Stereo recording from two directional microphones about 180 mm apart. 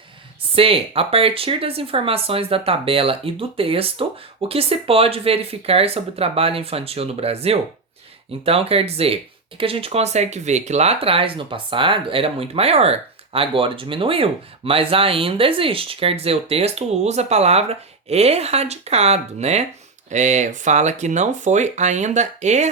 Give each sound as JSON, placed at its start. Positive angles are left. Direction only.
{"t": 0.5, "sound": "speech", "side_deg": -30}